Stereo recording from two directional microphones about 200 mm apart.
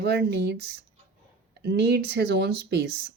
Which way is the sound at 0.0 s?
55° right (ahead or behind).